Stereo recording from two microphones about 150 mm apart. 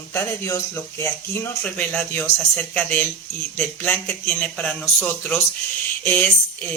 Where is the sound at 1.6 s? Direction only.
5° left (ahead or behind).